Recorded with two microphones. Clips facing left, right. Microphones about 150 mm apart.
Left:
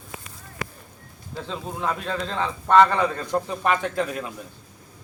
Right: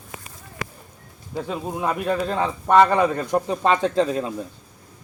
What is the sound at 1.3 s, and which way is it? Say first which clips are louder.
A man's voice: right 5 dB; 15° right (ahead or behind).